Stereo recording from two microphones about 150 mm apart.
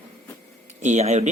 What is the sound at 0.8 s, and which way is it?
Speech, 50° right (ahead or behind).